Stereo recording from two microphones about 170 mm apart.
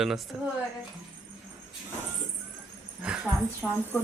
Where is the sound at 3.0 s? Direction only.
5° right (ahead or behind).